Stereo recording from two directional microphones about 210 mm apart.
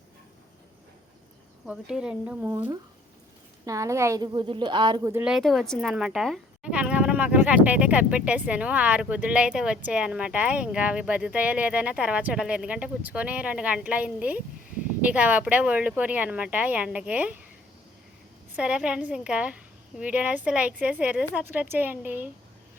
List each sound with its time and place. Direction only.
1.6 s speech: 5° right (ahead or behind)
5.2 s speech: centre (ahead or behind)
18.5 s speech: 5° right (ahead or behind)